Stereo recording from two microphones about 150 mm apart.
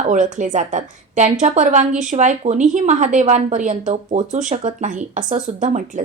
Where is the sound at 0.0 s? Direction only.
55° right (ahead or behind).